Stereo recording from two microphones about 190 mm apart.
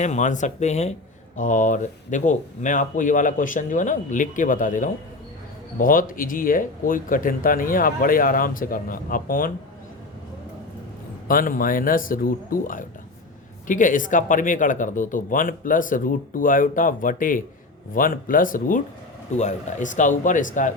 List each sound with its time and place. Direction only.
0.0 s speech: 40° left (ahead or behind)
11.3 s speech: 45° left (ahead or behind)